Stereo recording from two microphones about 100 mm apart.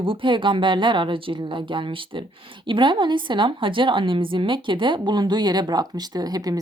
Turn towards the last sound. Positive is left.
turn(degrees=-40)  # may be behind; listen again after turning